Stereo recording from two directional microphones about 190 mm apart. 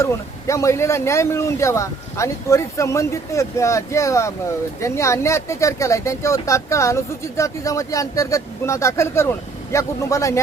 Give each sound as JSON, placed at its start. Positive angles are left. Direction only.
{"t": 0.0, "sound": "speech", "side_deg": 15}